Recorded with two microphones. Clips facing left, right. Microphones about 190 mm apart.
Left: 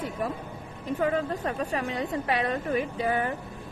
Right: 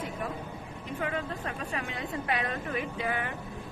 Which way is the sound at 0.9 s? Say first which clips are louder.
Left 7 dB; 40° left (ahead or behind).